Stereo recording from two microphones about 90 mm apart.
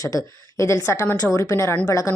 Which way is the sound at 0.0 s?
40° left (ahead or behind).